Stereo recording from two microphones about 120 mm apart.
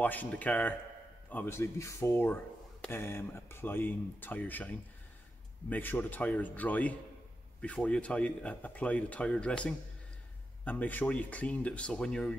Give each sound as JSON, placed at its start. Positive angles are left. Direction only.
{"t": 0.0, "sound": "speech", "side_deg": 15}